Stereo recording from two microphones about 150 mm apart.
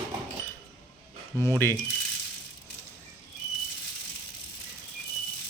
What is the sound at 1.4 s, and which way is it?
Speech, 15° left (ahead or behind).